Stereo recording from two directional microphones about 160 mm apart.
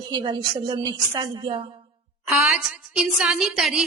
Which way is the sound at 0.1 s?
30° right (ahead or behind).